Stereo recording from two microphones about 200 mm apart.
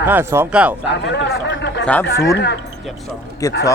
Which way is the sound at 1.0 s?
60° left (ahead or behind).